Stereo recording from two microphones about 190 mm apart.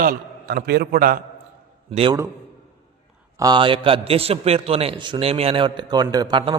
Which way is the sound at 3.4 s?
25° right (ahead or behind).